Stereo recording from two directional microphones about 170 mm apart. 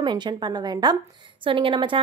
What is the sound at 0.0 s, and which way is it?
A woman's voice, 25° right (ahead or behind).